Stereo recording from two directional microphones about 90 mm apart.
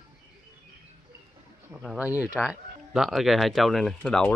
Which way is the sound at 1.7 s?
5° right (ahead or behind).